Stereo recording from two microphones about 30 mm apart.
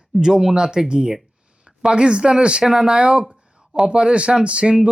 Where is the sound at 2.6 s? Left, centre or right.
Right.